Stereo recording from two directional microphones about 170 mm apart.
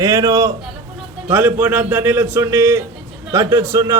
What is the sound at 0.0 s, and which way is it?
A man's voice, 20° right (ahead or behind).